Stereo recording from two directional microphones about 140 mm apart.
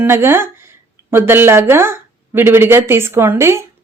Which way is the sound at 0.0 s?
15° right (ahead or behind).